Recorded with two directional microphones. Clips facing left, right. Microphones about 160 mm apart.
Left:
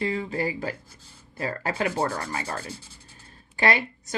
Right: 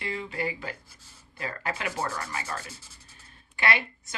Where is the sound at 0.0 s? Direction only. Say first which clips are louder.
Left 5 dB; 35° left (ahead or behind).